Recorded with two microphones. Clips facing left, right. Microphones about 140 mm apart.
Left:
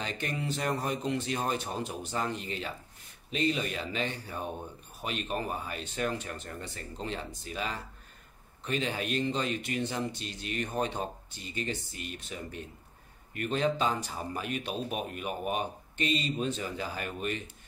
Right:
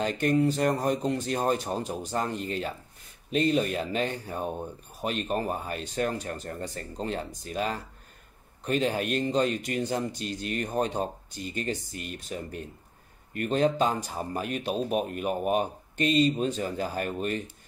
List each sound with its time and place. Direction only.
0.0 s speech: 45° right (ahead or behind)